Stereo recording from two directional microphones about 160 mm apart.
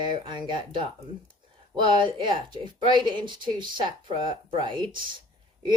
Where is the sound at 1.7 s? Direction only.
30° right (ahead or behind).